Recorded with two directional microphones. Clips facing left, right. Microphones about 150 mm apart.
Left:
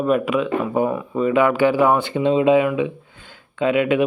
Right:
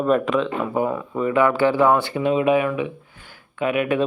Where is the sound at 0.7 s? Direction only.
20° left (ahead or behind).